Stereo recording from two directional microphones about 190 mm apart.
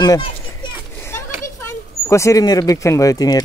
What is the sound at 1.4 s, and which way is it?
Speech, 15° left (ahead or behind).